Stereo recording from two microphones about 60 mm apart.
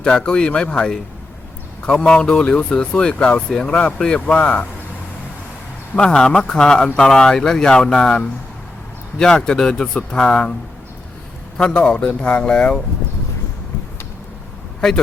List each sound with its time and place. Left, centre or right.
0.0 s speech: centre
5.9 s speech: centre
11.5 s speech: centre
14.8 s speech: centre